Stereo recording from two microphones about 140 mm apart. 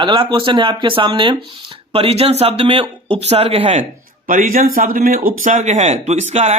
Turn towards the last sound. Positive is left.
turn(degrees=-55)  # may be behind; listen again after turning